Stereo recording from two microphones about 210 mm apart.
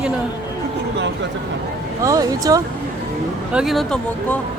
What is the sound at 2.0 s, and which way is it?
Speech, 15° right (ahead or behind).